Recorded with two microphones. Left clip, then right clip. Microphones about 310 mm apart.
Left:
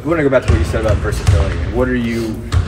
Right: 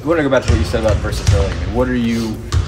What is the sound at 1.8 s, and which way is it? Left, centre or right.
Speech, right.